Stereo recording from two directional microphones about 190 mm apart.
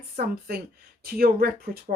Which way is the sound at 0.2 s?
55° right (ahead or behind).